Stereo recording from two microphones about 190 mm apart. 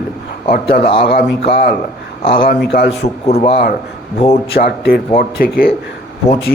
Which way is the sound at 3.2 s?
30° left (ahead or behind).